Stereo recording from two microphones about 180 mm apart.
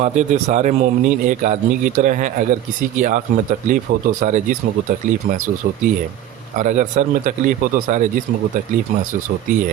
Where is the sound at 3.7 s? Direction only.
45° right (ahead or behind).